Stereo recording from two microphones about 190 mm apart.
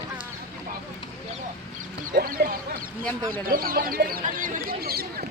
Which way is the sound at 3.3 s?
50° right (ahead or behind).